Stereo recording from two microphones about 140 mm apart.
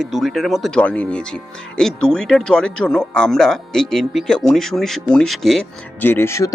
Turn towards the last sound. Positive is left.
turn(degrees=20)  # may be behind; listen again after turning